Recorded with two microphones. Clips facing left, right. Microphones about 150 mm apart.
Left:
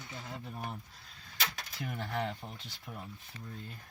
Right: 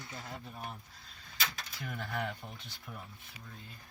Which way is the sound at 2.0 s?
30° left (ahead or behind).